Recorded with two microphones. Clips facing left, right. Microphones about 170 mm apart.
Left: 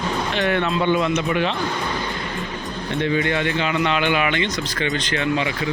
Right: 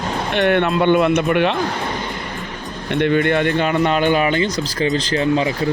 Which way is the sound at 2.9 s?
60° right (ahead or behind).